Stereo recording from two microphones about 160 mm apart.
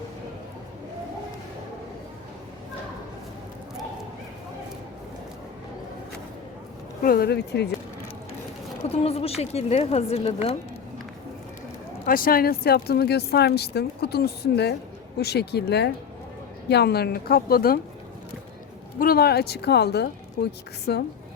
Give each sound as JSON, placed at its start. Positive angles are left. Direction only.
{"t": 7.0, "sound": "speech", "side_deg": 70}
{"t": 8.9, "sound": "speech", "side_deg": 40}
{"t": 12.0, "sound": "a woman's voice", "side_deg": 65}
{"t": 18.9, "sound": "speech", "side_deg": 70}